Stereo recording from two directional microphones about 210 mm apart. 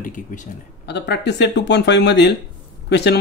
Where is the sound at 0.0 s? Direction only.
40° left (ahead or behind).